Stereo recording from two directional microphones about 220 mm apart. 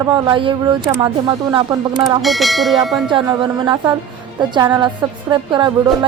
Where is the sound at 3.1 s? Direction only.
20° right (ahead or behind).